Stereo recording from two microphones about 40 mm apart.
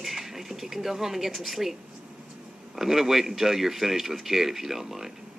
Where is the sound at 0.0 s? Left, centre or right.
Centre.